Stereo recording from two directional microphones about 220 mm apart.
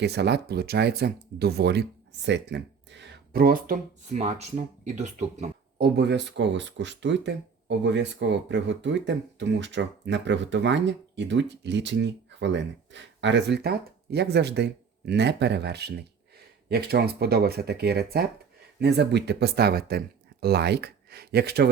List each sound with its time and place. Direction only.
0.0 s speech: 50° right (ahead or behind); by 5.8 s 30° right (ahead or behind)
5.8 s speech: 50° right (ahead or behind)